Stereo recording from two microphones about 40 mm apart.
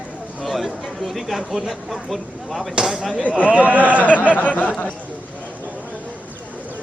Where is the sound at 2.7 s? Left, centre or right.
Centre.